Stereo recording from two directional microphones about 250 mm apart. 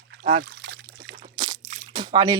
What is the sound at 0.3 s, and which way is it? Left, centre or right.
Trickle, right.